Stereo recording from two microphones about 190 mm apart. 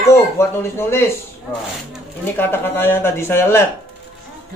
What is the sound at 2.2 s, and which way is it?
Speech, 10° left (ahead or behind).